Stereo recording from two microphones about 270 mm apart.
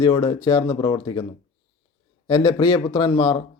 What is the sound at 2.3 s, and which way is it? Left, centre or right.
A man's voice, centre.